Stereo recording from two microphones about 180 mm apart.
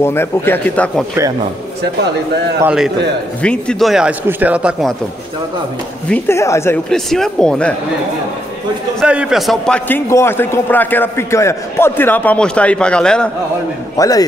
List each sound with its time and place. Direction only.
0.0 s a man's voice: 15° left (ahead or behind)
2.6 s speech: 5° right (ahead or behind)
6.0 s a man's voice: 10° left (ahead or behind)
6.9 s speech: 5° left (ahead or behind)
9.0 s speech: 5° right (ahead or behind)
9.8 s a man's voice: 15° left (ahead or behind)
13.9 s a man's voice: 20° left (ahead or behind)